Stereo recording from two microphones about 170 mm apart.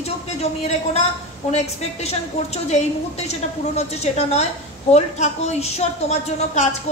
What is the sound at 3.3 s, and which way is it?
A woman's voice, 40° left (ahead or behind).